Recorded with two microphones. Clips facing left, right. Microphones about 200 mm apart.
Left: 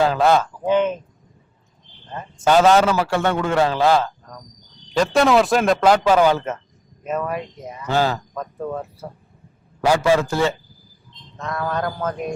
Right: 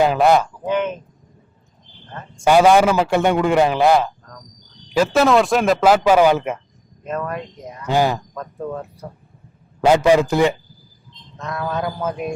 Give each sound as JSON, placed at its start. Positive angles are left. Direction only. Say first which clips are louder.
{"t": 0.0, "sound": "a man's voice", "louder": "right 2 dB", "side_deg": -15}
{"t": 0.6, "sound": "speech", "louder": "left 3 dB", "side_deg": 20}
{"t": 2.4, "sound": "a man's voice", "louder": "right 2 dB", "side_deg": -10}
{"t": 4.9, "sound": "speech", "louder": "right 1 dB", "side_deg": 0}
{"t": 7.0, "sound": "speech", "louder": "left 1 dB", "side_deg": 5}
{"t": 7.9, "sound": "a man's voice", "louder": "right 2 dB", "side_deg": -15}
{"t": 8.4, "sound": "speech", "louder": "left 1 dB", "side_deg": 5}
{"t": 9.8, "sound": "a man's voice", "louder": "right 3 dB", "side_deg": -20}
{"t": 11.3, "sound": "speech", "louder": "even", "side_deg": 0}